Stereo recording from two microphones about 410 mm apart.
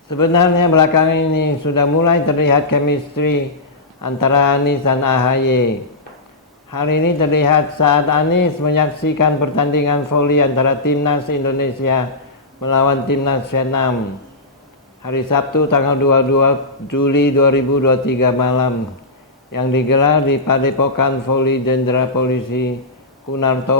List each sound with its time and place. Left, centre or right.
0.1 s a man's voice: left
6.7 s a man's voice: left
15.0 s a man's voice: left